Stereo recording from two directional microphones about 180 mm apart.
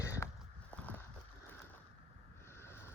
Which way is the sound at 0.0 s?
15° left (ahead or behind).